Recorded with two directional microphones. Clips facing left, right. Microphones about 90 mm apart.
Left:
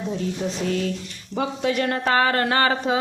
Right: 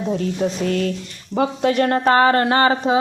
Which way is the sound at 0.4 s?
55° right (ahead or behind).